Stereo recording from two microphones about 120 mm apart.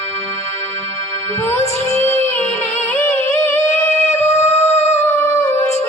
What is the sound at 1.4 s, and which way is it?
Music, 25° left (ahead or behind).